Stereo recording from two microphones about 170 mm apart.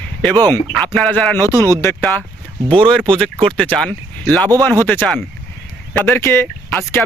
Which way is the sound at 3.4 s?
5° left (ahead or behind).